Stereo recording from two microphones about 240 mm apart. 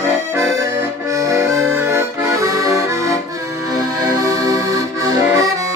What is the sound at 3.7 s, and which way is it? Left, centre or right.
Music, centre.